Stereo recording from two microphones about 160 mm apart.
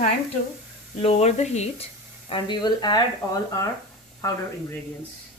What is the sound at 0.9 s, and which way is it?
Speech, 40° left (ahead or behind).